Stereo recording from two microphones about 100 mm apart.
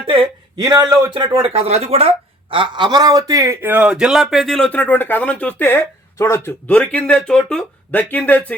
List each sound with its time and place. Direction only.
0.5 s speech: 40° right (ahead or behind)
1.1 s speech: 55° right (ahead or behind)
1.5 s speech: 90° right; by 4.7 s 5° left (ahead or behind)
4.7 s speech: 20° left (ahead or behind)
6.1 s speech: 30° left (ahead or behind)
6.7 s speech: 15° left (ahead or behind)